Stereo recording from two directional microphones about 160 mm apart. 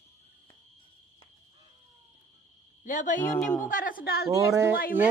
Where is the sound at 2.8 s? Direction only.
55° left (ahead or behind); by 4.3 s 75° left (ahead or behind).